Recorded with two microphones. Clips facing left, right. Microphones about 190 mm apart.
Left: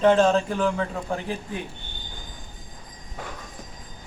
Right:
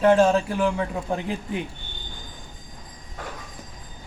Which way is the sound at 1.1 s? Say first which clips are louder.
Right 4 dB; 20° right (ahead or behind).